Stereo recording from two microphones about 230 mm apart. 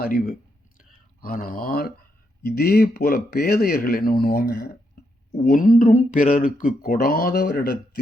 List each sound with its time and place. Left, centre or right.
0.0 s a man's voice: left
0.8 s a sound: left
2.4 s a man's voice: left